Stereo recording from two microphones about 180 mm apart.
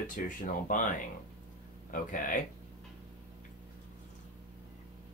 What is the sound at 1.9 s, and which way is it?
Speech, 45° left (ahead or behind).